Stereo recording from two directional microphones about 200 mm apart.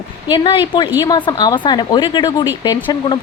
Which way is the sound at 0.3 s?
25° left (ahead or behind).